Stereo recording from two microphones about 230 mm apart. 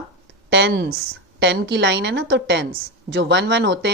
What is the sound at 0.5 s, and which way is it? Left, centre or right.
Speech, right.